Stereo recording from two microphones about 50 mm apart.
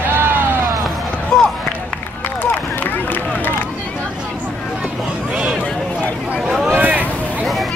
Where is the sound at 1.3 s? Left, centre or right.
Centre.